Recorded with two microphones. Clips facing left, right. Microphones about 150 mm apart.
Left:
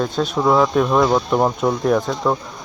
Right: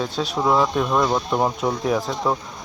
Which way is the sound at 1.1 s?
10° left (ahead or behind).